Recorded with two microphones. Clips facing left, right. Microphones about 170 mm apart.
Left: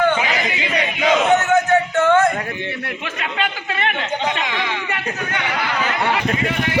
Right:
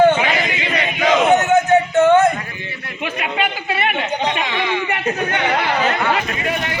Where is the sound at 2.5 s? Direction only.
60° left (ahead or behind).